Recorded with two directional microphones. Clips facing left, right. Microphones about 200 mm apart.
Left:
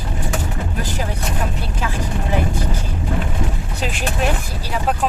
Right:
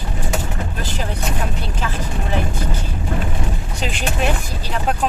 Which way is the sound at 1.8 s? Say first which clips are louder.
Left 2 dB; 10° left (ahead or behind).